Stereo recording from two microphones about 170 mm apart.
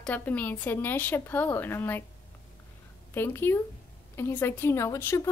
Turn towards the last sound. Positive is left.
turn(degrees=15)  # may be behind; listen again after turning